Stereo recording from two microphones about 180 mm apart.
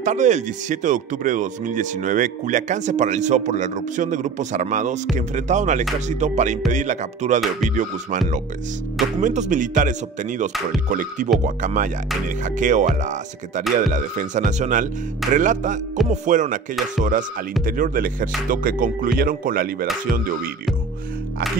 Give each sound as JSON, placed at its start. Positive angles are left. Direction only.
{"t": 0.0, "sound": "speech", "side_deg": -45}
{"t": 9.2, "sound": "speech", "side_deg": -45}